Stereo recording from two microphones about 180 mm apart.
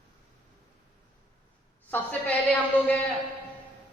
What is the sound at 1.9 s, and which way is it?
A woman's voice, 10° left (ahead or behind).